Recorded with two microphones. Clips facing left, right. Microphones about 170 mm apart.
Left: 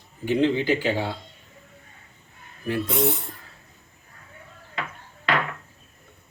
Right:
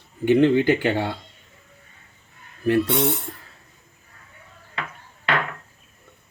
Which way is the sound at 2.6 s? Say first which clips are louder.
Right 7 dB; 75° right (ahead or behind).